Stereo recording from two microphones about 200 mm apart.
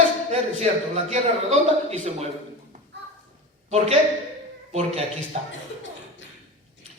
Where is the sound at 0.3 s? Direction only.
35° right (ahead or behind).